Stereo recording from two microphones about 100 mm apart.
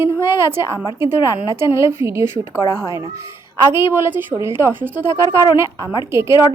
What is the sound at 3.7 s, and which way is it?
Speech, 25° right (ahead or behind).